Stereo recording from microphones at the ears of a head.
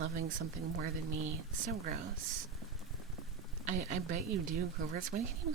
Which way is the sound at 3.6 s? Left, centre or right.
Right.